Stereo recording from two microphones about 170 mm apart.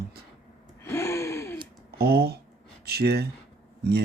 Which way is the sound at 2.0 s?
70° right (ahead or behind).